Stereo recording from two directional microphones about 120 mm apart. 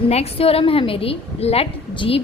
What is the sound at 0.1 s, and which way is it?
A woman's voice, 55° left (ahead or behind).